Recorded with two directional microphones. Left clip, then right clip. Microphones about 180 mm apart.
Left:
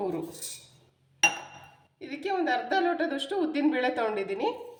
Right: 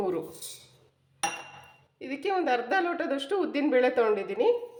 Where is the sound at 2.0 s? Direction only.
40° right (ahead or behind).